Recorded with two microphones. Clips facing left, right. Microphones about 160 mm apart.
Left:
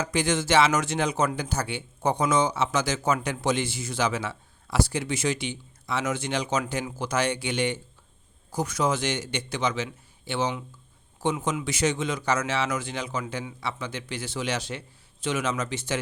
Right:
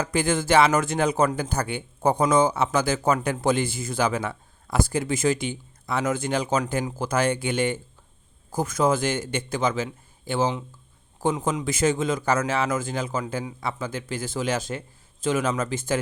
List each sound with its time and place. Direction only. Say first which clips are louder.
0.0 s a man's voice: right 2 dB; 50° right (ahead or behind)